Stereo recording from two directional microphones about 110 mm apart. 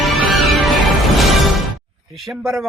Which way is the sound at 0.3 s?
Centre (ahead or behind).